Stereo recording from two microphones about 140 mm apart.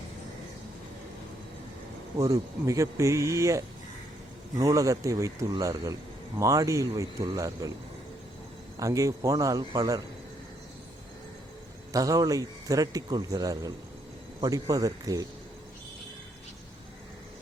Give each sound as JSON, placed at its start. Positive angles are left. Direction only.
{"t": 2.1, "sound": "speech", "side_deg": -25}
{"t": 8.8, "sound": "speech", "side_deg": -25}
{"t": 11.9, "sound": "speech", "side_deg": -25}